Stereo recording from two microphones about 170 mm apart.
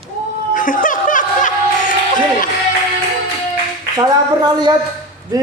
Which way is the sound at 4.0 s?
25° right (ahead or behind).